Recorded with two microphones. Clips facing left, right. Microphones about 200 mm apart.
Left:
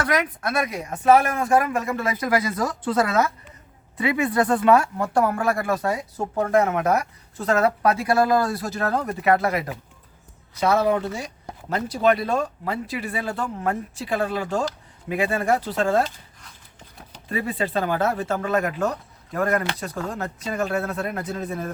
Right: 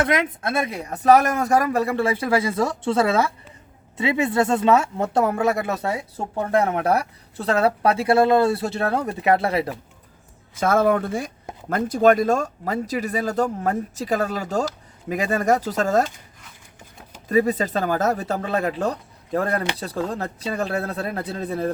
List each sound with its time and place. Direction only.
0.0 s speech: 25° right (ahead or behind)
10.6 s speech: 50° right (ahead or behind); by 21.7 s 35° right (ahead or behind)